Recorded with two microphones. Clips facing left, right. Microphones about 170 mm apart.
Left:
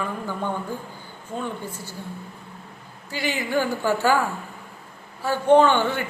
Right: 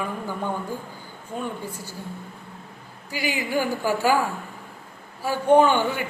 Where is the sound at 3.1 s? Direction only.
10° right (ahead or behind).